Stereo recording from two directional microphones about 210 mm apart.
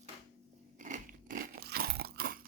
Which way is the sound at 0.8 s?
40° right (ahead or behind).